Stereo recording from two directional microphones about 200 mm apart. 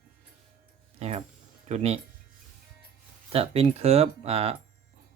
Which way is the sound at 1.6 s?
30° right (ahead or behind).